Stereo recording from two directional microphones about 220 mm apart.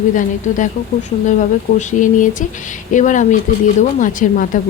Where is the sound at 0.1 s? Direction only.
35° left (ahead or behind).